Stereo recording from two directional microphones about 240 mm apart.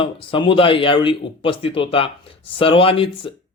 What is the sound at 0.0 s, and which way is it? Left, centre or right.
Speech, left.